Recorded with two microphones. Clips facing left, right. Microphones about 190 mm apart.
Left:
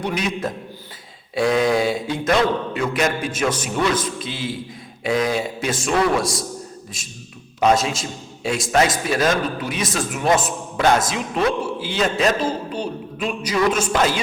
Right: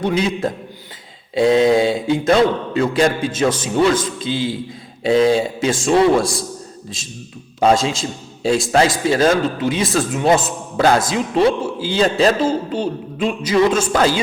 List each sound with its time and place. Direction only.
0.0 s a man's voice: 25° right (ahead or behind)
7.6 s a man's voice: 30° right (ahead or behind)